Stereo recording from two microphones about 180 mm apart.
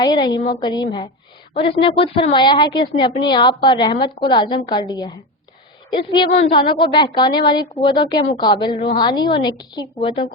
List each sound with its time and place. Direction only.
0.0 s a woman's voice: 20° left (ahead or behind)
6.3 s speech: 35° left (ahead or behind)
6.6 s a woman's voice: 25° left (ahead or behind)